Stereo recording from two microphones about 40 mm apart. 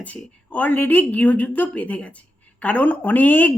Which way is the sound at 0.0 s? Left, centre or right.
Left.